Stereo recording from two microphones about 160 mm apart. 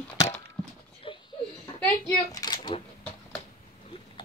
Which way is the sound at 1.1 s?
30° left (ahead or behind).